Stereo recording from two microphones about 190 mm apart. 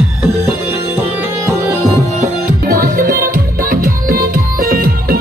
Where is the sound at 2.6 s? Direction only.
50° right (ahead or behind).